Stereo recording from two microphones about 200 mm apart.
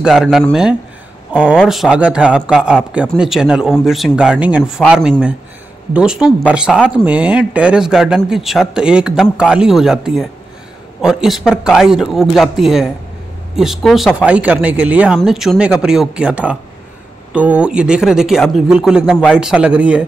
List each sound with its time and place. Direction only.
0.0 s speech: centre (ahead or behind)